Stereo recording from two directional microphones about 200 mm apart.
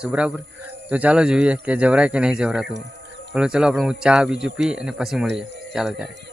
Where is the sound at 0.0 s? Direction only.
5° right (ahead or behind).